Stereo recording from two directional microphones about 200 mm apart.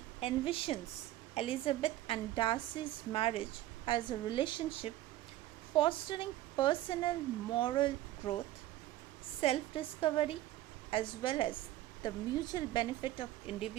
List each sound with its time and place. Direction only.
0.2 s a woman's voice: 25° left (ahead or behind)
9.4 s a woman's voice: 30° left (ahead or behind)